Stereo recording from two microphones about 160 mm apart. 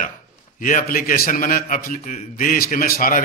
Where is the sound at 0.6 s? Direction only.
55° left (ahead or behind).